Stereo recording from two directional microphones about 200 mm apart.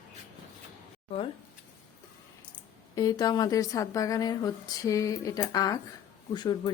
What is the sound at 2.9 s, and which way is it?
Speech, 20° left (ahead or behind).